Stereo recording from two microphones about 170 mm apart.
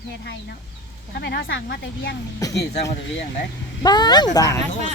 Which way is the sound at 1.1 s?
75° left (ahead or behind).